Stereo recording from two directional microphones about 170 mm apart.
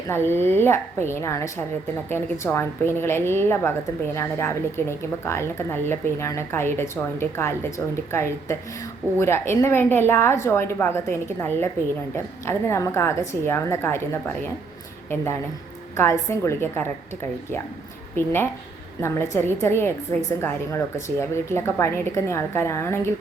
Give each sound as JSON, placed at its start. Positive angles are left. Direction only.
{"t": 0.1, "sound": "a woman's voice", "side_deg": 15}
{"t": 16.0, "sound": "a woman's voice", "side_deg": 15}
{"t": 18.2, "sound": "a woman's voice", "side_deg": 15}